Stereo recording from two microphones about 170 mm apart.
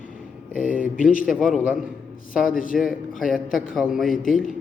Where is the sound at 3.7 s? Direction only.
Centre (ahead or behind).